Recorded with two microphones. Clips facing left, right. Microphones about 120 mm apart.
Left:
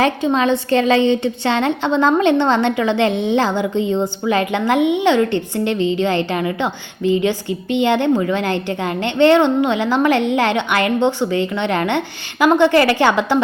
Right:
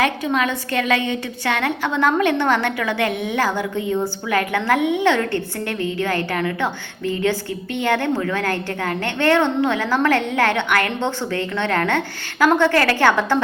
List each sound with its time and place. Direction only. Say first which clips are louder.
0.0 s a woman's voice: left 4 dB; 30° left (ahead or behind)